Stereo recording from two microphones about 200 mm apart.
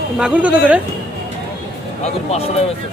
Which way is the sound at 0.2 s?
5° right (ahead or behind).